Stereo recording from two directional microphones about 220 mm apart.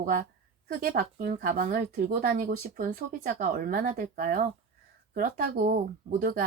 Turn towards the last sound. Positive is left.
turn(degrees=-40)  # may be behind; listen again after turning